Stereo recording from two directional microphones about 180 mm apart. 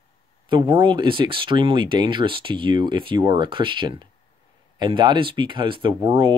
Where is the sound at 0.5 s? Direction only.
25° right (ahead or behind).